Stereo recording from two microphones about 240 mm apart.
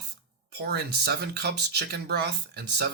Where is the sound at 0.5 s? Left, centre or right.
Right.